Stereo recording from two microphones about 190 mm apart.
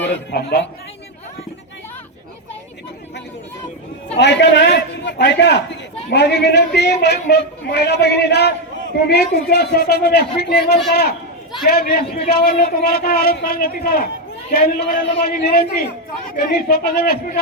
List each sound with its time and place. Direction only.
0.3 s speech: 60° left (ahead or behind)
4.2 s a man's voice: 65° left (ahead or behind)